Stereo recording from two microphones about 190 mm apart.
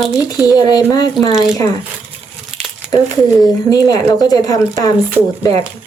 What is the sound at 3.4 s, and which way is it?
Speech, 20° left (ahead or behind).